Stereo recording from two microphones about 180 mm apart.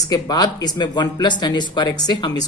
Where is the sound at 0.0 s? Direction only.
20° left (ahead or behind).